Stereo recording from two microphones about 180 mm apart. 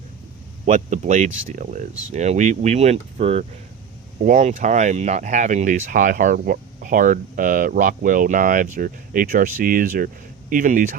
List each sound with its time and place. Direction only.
0.6 s speech: 40° right (ahead or behind)